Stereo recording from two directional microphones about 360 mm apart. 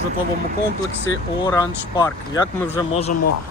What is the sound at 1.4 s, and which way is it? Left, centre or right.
Speech, centre.